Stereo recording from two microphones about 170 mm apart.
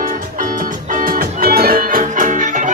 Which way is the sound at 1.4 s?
65° right (ahead or behind).